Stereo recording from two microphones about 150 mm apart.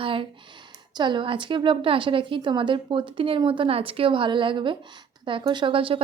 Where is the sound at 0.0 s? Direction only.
35° right (ahead or behind).